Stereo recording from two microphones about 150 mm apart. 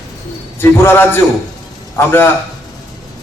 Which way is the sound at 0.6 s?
15° left (ahead or behind).